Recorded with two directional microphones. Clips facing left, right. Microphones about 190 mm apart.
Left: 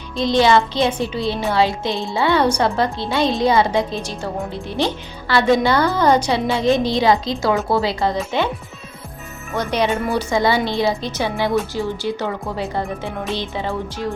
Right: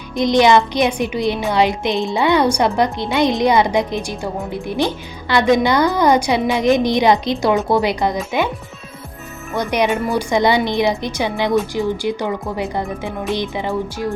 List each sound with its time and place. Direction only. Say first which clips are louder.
0.2 s speech: right 2 dB; 15° right (ahead or behind)
9.6 s speech: right 2 dB; 15° right (ahead or behind)